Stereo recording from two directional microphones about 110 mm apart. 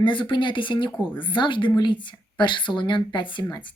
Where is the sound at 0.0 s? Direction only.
45° left (ahead or behind).